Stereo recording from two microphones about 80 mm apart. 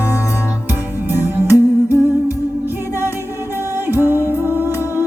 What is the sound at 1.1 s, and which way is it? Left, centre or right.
Music, right.